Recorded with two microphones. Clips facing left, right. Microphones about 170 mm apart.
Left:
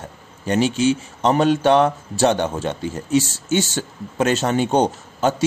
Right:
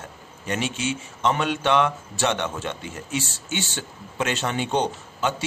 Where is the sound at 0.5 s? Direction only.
35° left (ahead or behind).